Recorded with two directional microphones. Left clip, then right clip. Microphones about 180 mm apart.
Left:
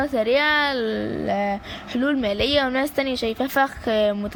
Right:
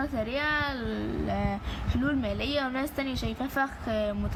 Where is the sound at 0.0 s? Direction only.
50° left (ahead or behind).